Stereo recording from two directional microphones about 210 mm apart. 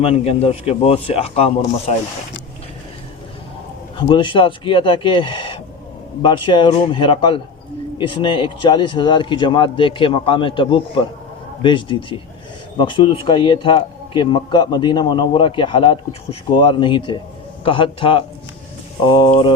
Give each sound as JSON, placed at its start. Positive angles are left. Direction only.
{"t": 0.0, "sound": "a man's voice", "side_deg": 30}
{"t": 3.9, "sound": "a man's voice", "side_deg": 25}